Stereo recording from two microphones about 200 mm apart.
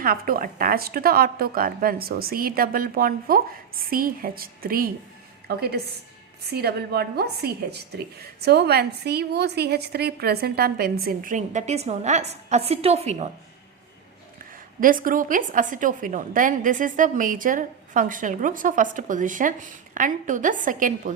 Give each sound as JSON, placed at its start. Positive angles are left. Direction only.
{"t": 0.0, "sound": "a woman's voice", "side_deg": -45}
{"t": 14.8, "sound": "a woman's voice", "side_deg": -45}